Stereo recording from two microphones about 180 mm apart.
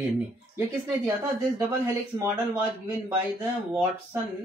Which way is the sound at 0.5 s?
15° right (ahead or behind).